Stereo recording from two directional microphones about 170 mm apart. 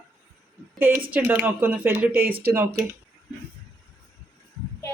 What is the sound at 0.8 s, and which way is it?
Speech, 10° right (ahead or behind).